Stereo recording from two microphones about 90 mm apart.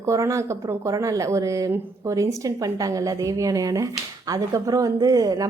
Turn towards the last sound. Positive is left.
turn(degrees=-45)  # may be behind; listen again after turning